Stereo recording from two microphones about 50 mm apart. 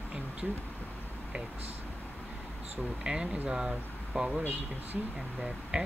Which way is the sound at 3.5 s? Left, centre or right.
Centre.